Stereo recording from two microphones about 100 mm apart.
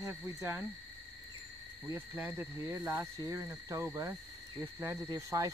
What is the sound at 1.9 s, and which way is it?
Speech, 20° right (ahead or behind).